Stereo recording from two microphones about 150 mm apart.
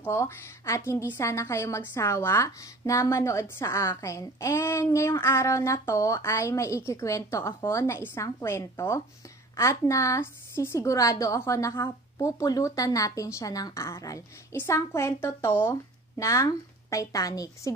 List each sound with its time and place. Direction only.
0.0 s a woman's voice: 15° left (ahead or behind)